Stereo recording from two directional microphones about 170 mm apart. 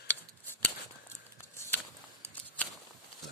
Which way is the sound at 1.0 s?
15° left (ahead or behind).